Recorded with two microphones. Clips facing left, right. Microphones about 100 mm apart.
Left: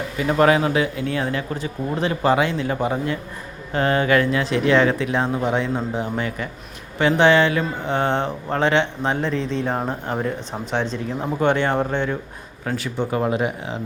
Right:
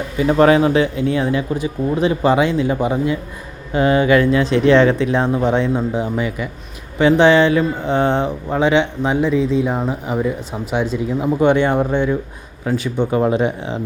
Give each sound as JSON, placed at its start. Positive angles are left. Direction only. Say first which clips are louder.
{"t": 0.2, "sound": "speech", "louder": "right 5 dB", "side_deg": -25}